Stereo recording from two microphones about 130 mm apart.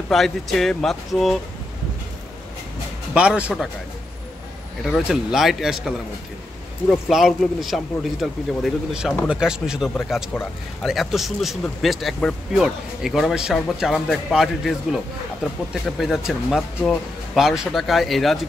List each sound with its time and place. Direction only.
0.1 s speech: centre (ahead or behind)
3.2 s speech: 10° right (ahead or behind)
4.8 s speech: centre (ahead or behind)
16.0 s speech: 5° right (ahead or behind)